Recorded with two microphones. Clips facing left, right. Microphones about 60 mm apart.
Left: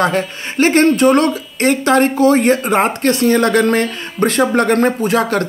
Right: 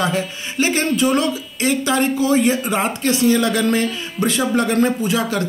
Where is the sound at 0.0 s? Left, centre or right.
Left.